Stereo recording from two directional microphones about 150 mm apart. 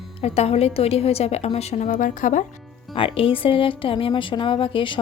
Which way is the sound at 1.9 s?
60° left (ahead or behind).